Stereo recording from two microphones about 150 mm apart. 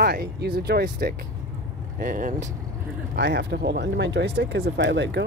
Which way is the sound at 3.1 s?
90° right.